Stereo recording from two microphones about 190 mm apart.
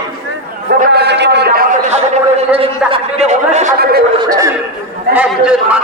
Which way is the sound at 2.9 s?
30° right (ahead or behind).